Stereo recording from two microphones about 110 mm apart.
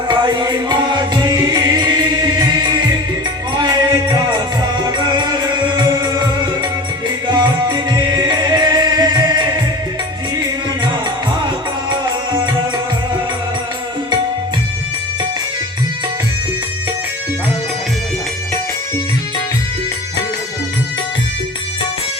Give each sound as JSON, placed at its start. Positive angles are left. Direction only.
{"t": 0.1, "sound": "music", "side_deg": -45}
{"t": 3.5, "sound": "music", "side_deg": -40}
{"t": 7.3, "sound": "music", "side_deg": -45}